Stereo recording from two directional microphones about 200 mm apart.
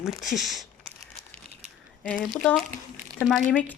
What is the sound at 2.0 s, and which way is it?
Speech, 5° left (ahead or behind).